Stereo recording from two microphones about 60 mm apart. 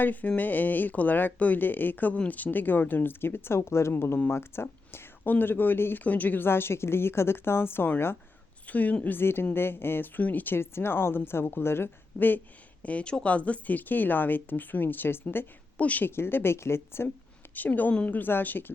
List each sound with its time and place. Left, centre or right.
0.0 s speech: left
8.6 s speech: left
12.8 s speech: left
15.8 s speech: left
16.0 s speech: left
17.5 s a woman's voice: left